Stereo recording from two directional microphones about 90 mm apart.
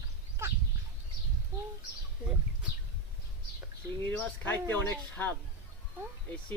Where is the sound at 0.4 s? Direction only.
30° right (ahead or behind).